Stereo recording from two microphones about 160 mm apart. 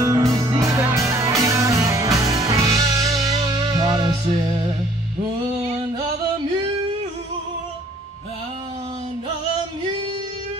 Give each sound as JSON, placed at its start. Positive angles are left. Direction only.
{"t": 0.0, "sound": "music", "side_deg": -20}